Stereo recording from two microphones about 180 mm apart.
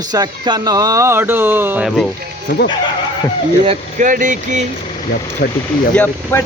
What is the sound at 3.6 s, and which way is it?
Speech, 40° right (ahead or behind).